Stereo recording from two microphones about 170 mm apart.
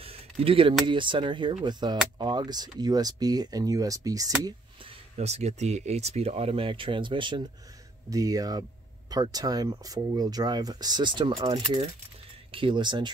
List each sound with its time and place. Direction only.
0.0 s a sound: 35° right (ahead or behind)
0.8 s speech: 30° right (ahead or behind)
5.1 s speech: 40° right (ahead or behind)